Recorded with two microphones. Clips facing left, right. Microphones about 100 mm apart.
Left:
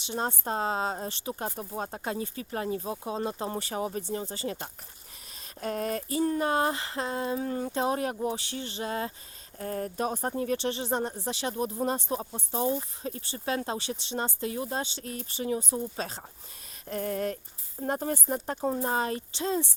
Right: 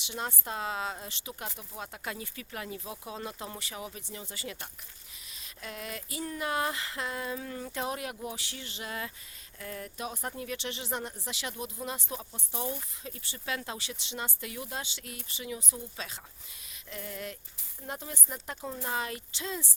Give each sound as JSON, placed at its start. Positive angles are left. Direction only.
{"t": 0.0, "sound": "speech", "side_deg": 35}
{"t": 16.9, "sound": "a sound", "side_deg": 45}
{"t": 17.7, "sound": "speech", "side_deg": 45}